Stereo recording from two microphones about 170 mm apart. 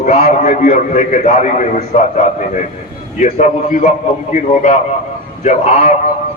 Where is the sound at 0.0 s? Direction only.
45° left (ahead or behind).